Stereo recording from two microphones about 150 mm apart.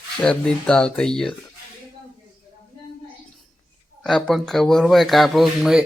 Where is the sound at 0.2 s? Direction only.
5° left (ahead or behind).